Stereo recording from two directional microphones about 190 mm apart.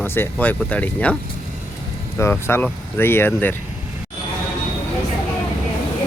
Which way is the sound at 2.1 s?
10° left (ahead or behind).